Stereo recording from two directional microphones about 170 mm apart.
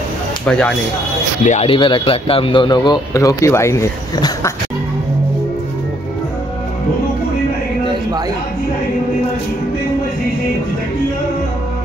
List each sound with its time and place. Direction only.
0.5 s speech: 5° left (ahead or behind)
1.4 s a man's voice: 40° left (ahead or behind); by 4.5 s 15° left (ahead or behind)